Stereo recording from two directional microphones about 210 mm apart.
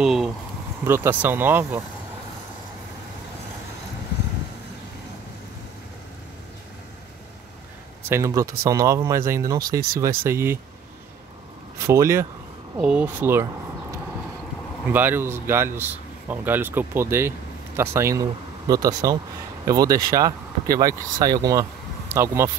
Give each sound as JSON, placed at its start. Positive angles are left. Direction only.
{"t": 0.0, "sound": "speech", "side_deg": 0}
{"t": 8.1, "sound": "speech", "side_deg": -15}
{"t": 11.8, "sound": "speech", "side_deg": -15}
{"t": 14.9, "sound": "speech", "side_deg": -10}